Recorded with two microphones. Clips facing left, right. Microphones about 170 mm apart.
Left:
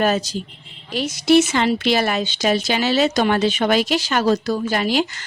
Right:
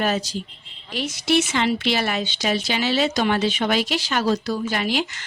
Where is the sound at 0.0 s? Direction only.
45° left (ahead or behind).